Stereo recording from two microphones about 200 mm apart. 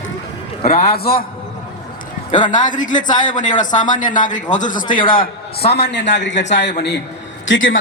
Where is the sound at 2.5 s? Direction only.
40° left (ahead or behind).